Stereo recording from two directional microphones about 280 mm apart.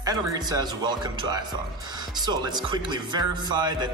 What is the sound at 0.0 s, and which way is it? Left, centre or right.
Speech, centre.